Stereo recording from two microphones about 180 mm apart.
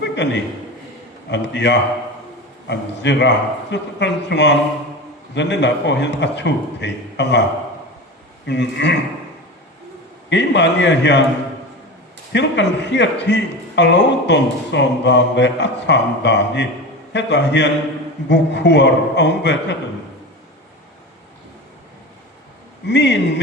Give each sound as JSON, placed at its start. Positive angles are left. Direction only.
{"t": 0.0, "sound": "a sound", "side_deg": 75}
{"t": 1.3, "sound": "a man's voice", "side_deg": 75}
{"t": 8.4, "sound": "a man's voice", "side_deg": 70}
{"t": 10.2, "sound": "a man's voice", "side_deg": 75}
{"t": 12.3, "sound": "a man's voice", "side_deg": 75}
{"t": 22.9, "sound": "a man's voice", "side_deg": 75}